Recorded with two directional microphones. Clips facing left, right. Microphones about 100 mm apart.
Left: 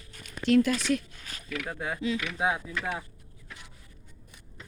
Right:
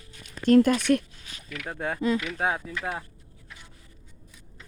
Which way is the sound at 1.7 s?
45° right (ahead or behind).